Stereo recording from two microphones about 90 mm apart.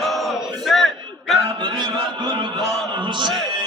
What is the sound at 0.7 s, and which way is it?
Battle cry, centre (ahead or behind).